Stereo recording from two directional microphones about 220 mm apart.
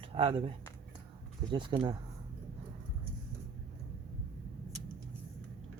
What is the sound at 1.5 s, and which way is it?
Speech, 20° right (ahead or behind).